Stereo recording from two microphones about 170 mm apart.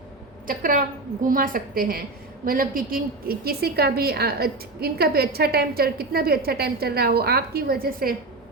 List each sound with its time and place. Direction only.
0.4 s a woman's voice: 55° right (ahead or behind)